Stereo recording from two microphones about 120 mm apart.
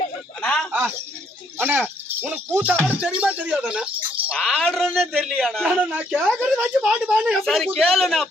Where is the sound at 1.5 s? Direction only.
15° right (ahead or behind); by 5.6 s 5° left (ahead or behind).